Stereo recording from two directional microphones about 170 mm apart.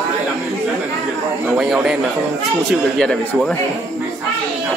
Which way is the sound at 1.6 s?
5° right (ahead or behind).